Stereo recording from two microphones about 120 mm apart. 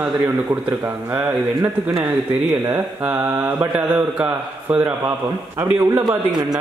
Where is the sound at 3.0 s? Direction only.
15° right (ahead or behind).